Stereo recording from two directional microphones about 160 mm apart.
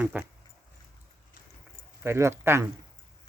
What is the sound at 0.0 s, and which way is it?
Speech, 10° right (ahead or behind).